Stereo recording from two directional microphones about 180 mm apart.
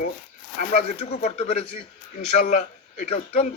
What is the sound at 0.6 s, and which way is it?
A man's voice, 40° left (ahead or behind).